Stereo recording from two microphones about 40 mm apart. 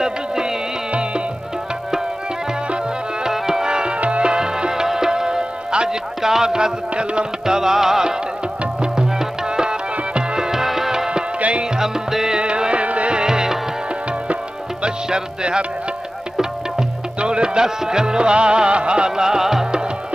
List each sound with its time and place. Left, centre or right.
0.0 s music: centre
3.3 s music: centre
12.4 s music: right
13.2 s music: centre
14.8 s music: right
17.2 s music: right